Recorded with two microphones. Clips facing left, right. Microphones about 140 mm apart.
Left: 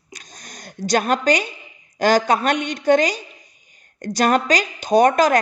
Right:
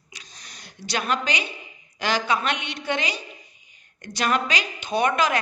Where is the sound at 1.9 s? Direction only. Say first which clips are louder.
Left 8 dB; 45° left (ahead or behind).